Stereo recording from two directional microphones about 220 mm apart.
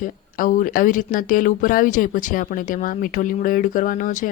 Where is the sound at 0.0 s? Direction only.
40° left (ahead or behind).